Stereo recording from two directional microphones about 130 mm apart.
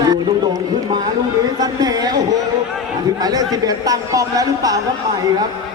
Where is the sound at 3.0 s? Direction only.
30° right (ahead or behind).